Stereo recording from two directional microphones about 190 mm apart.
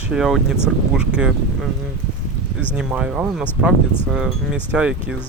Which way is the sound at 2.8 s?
5° right (ahead or behind).